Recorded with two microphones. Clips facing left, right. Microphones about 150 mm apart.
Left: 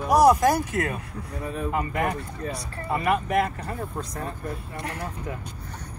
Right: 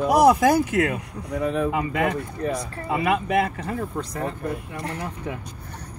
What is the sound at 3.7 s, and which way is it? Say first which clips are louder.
Speech: right 4 dB; 70° right (ahead or behind).